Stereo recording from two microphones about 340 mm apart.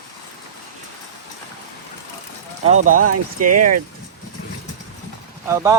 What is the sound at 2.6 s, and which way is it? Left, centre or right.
Speech, centre.